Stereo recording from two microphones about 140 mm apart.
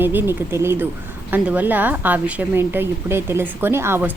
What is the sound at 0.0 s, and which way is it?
A woman's voice, 15° right (ahead or behind).